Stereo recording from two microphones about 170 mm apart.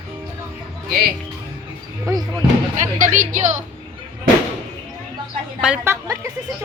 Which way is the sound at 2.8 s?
50° right (ahead or behind).